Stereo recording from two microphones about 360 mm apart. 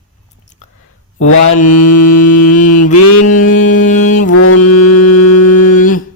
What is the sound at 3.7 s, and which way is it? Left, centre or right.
Music, left.